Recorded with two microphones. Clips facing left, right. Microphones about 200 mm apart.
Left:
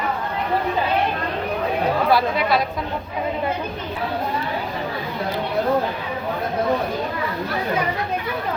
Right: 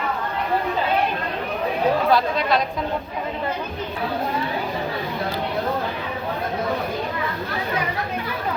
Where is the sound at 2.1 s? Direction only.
10° left (ahead or behind).